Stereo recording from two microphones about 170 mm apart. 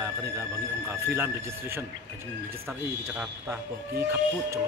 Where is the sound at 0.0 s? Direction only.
15° right (ahead or behind).